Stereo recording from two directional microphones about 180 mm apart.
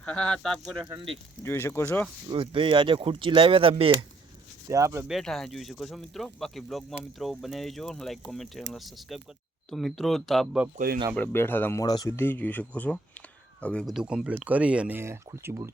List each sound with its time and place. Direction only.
0.0 s speech: 5° left (ahead or behind)
0.9 s speech: 30° right (ahead or behind)
1.5 s speech: 15° left (ahead or behind)
2.3 s speech: 30° right (ahead or behind)
4.7 s speech: 15° right (ahead or behind)
5.0 s speech: centre (ahead or behind)
10.8 s speech: 50° right (ahead or behind)
11.1 s speech: 10° left (ahead or behind); by 15.7 s 15° right (ahead or behind)